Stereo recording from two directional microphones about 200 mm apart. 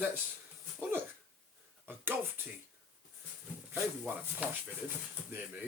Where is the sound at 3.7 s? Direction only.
10° right (ahead or behind).